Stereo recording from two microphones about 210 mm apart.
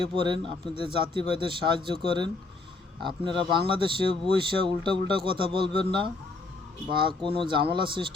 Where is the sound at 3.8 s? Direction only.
25° right (ahead or behind).